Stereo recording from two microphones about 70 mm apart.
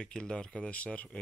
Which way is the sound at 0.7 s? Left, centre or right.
Centre.